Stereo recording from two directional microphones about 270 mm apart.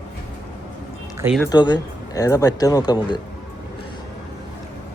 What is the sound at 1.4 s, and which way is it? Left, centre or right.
Speech, centre.